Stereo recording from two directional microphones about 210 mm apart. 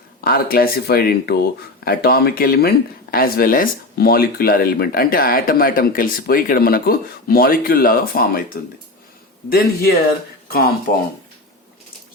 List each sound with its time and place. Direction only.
0.3 s speech: 45° left (ahead or behind)